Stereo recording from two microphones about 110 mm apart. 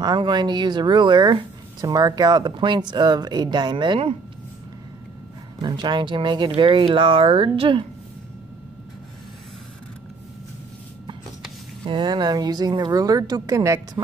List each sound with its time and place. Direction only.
0.0 s speech: 40° right (ahead or behind)
5.6 s speech: 40° right (ahead or behind)
11.8 s speech: 45° right (ahead or behind)